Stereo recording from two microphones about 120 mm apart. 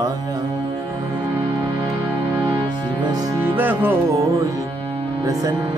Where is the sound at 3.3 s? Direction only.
15° right (ahead or behind).